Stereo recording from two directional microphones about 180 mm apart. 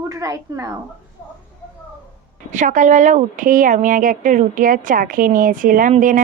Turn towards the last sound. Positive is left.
turn(degrees=-45)  # may be behind; listen again after turning